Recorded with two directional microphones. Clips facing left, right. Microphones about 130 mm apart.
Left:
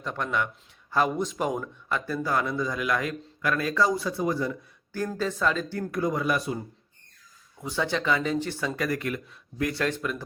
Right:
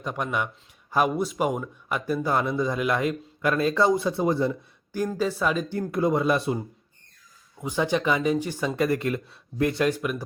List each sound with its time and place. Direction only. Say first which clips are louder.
0.0 s speech: right 1 dB; 15° right (ahead or behind)
4.9 s speech: right 3 dB; 10° right (ahead or behind)
7.6 s speech: right 4 dB; 15° right (ahead or behind); by 9.7 s 30° right (ahead or behind)
9.7 s speech: right 4 dB; 15° right (ahead or behind)